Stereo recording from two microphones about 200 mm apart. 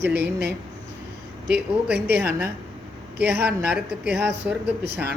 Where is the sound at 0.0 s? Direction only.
55° right (ahead or behind).